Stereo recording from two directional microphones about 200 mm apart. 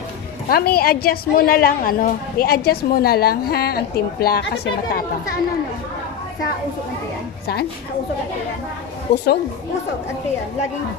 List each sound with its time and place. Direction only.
0.5 s a woman's voice: 50° left (ahead or behind)
9.1 s a woman's voice: 55° left (ahead or behind)